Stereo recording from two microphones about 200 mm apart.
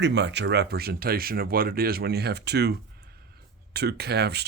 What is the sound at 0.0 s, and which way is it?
Speech, 60° right (ahead or behind).